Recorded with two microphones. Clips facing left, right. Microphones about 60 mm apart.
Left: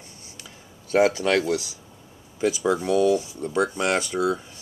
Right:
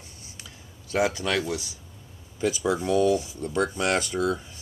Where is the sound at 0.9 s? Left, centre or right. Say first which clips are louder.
Left 5 dB; left.